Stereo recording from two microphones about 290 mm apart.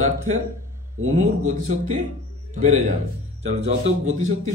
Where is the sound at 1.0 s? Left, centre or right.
Right.